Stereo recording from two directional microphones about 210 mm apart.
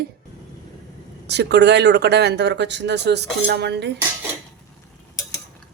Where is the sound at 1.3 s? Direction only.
55° right (ahead or behind).